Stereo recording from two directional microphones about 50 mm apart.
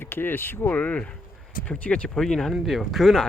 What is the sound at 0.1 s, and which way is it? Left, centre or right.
Speech, left.